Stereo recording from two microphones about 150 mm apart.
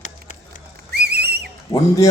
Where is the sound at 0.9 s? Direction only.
90° right.